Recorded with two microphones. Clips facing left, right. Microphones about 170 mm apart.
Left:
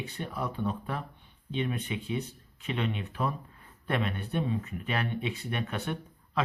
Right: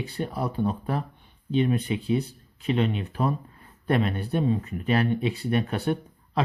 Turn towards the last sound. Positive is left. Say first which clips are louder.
# right 5 dB
turn(degrees=-35)  # may be behind; listen again after turning